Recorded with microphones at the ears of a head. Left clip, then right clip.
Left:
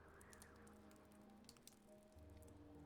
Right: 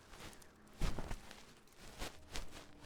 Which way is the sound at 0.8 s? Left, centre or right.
Right.